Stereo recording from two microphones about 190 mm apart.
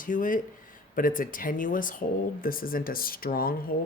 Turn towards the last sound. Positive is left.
turn(degrees=50)  # may be behind; listen again after turning